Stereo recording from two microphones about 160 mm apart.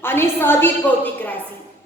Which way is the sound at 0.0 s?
15° left (ahead or behind).